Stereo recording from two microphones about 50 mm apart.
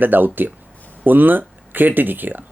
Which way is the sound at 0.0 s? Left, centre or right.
Right.